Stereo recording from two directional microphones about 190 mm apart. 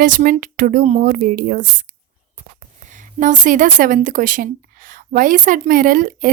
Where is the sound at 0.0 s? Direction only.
45° right (ahead or behind).